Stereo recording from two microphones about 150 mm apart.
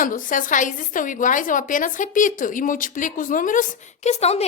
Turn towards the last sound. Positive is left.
turn(degrees=45)  # may be behind; listen again after turning